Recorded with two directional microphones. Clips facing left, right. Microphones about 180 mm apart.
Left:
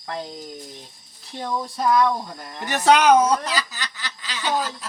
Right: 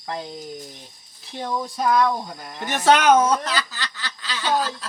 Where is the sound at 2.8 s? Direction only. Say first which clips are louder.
Left 1 dB; 15° left (ahead or behind).